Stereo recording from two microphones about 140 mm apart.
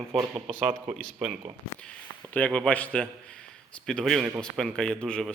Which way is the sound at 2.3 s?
10° left (ahead or behind).